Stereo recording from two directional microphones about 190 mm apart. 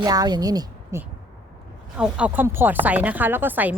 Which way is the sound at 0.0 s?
20° right (ahead or behind).